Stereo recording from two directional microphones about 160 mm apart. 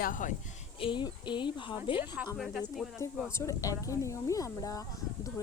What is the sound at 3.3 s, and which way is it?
Speech, 20° left (ahead or behind).